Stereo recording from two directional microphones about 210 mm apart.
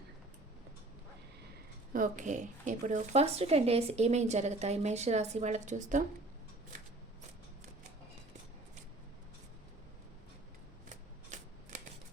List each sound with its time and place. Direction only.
1.9 s speech: 40° right (ahead or behind)
10.8 s shuffling cards: 35° right (ahead or behind)